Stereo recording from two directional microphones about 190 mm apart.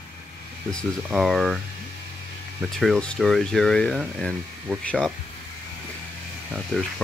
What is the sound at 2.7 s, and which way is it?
Speech, centre (ahead or behind).